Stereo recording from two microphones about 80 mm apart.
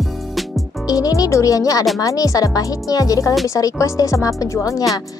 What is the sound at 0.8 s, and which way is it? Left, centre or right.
Speech, left.